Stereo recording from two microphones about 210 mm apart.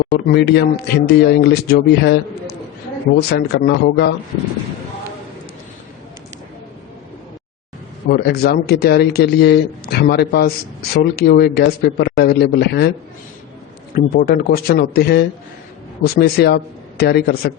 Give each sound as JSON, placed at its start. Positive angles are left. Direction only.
{"t": 0.0, "sound": "speech", "side_deg": 50}
{"t": 8.1, "sound": "speech", "side_deg": 50}
{"t": 13.9, "sound": "speech", "side_deg": 45}